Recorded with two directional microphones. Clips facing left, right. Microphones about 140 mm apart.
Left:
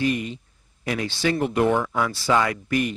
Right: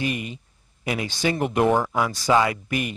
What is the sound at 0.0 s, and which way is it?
Speech, 10° right (ahead or behind).